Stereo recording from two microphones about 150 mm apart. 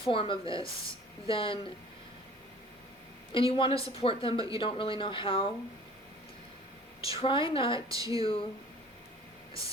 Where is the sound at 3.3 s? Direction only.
35° left (ahead or behind).